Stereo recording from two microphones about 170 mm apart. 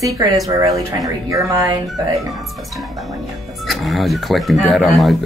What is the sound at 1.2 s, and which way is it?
Music, 20° right (ahead or behind).